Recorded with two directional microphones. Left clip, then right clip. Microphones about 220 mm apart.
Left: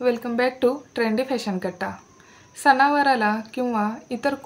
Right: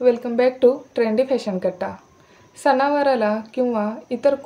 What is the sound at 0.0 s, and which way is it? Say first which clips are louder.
A woman's voice: right 5 dB; 40° left (ahead or behind).